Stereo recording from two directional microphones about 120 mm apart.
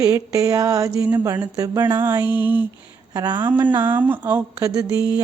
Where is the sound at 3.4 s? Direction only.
15° right (ahead or behind).